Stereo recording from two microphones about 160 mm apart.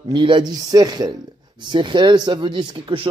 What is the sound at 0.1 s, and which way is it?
Speech, 30° right (ahead or behind).